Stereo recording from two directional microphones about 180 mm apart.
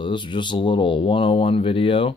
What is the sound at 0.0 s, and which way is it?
Speech, 25° left (ahead or behind).